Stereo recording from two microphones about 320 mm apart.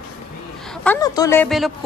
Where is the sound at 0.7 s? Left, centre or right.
Centre.